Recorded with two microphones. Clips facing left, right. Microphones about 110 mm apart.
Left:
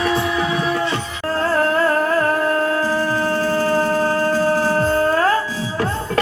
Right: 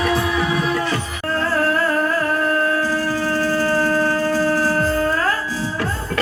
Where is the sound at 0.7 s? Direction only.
25° left (ahead or behind).